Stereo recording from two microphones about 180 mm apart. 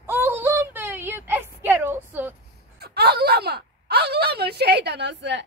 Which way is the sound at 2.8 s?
60° right (ahead or behind).